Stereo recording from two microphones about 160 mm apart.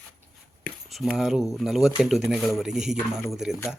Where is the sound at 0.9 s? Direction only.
Centre (ahead or behind).